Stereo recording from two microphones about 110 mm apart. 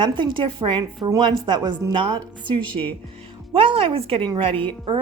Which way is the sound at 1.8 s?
30° right (ahead or behind).